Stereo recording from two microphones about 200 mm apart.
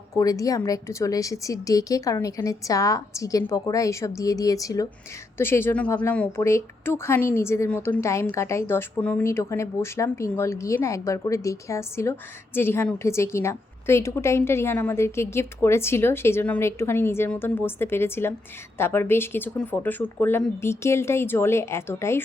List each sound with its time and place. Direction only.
0.2 s a woman's voice: 15° left (ahead or behind)